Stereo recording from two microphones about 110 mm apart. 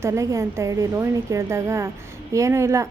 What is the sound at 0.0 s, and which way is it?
A woman's voice, 25° right (ahead or behind).